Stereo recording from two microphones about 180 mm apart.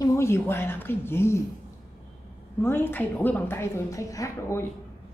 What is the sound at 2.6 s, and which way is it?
A woman's voice, 10° left (ahead or behind).